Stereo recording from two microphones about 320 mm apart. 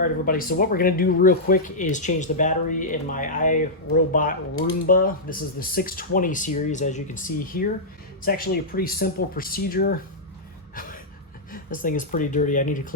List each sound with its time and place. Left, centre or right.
0.0 s speech: left
11.5 s speech: left